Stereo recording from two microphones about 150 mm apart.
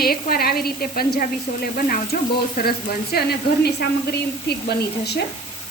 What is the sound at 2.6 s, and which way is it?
Frying, 90° left.